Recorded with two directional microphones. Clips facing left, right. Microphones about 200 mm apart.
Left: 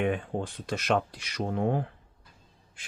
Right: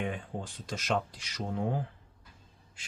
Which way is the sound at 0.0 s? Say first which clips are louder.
Left 7 dB; 65° left (ahead or behind).